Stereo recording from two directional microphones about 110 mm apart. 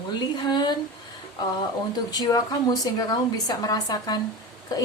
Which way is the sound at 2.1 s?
40° left (ahead or behind).